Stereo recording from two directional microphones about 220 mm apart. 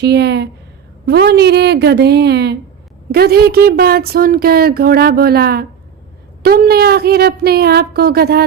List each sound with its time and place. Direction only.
0.0 s speech: 50° right (ahead or behind)